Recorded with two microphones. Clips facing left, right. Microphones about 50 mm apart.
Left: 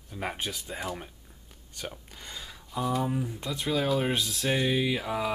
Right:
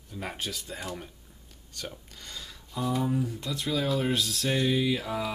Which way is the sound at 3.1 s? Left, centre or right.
Centre.